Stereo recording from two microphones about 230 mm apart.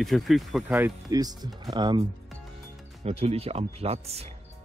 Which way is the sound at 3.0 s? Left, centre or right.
Right.